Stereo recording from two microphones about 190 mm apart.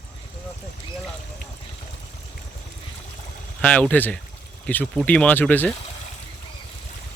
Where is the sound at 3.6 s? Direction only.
5° left (ahead or behind).